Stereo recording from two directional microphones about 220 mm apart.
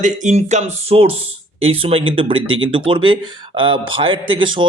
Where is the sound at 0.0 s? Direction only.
35° right (ahead or behind).